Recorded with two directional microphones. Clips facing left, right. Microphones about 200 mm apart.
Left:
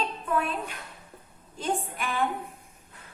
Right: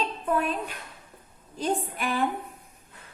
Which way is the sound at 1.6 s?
40° right (ahead or behind).